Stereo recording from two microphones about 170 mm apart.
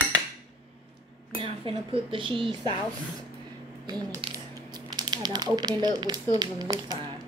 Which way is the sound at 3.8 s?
25° right (ahead or behind).